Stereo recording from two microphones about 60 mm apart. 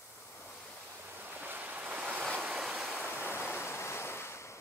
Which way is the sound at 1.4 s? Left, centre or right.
Right.